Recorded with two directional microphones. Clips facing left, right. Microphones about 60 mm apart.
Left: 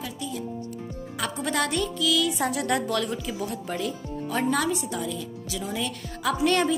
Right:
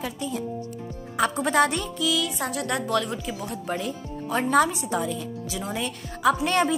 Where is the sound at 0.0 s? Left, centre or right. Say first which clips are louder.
Right 3 dB; right.